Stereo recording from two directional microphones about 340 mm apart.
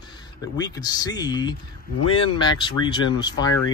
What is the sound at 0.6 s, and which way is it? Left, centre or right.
Speech, centre.